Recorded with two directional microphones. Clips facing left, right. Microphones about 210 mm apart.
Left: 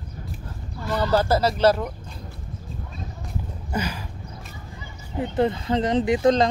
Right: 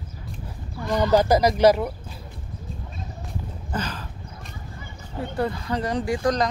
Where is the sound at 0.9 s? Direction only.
15° right (ahead or behind).